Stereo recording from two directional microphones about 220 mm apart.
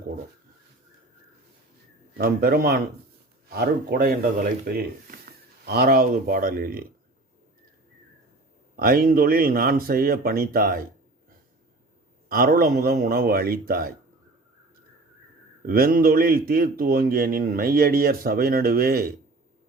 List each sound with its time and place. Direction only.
2.1 s speech: 45° right (ahead or behind)
8.7 s speech: 40° right (ahead or behind)
12.3 s a man's voice: 40° right (ahead or behind)
15.6 s a man's voice: 40° right (ahead or behind)